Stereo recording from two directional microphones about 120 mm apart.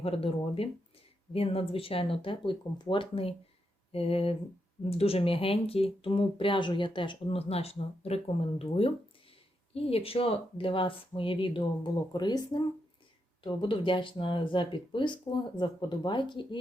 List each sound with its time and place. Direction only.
0.0 s speech: 55° left (ahead or behind); by 12.6 s 35° left (ahead or behind)
13.4 s speech: 45° left (ahead or behind)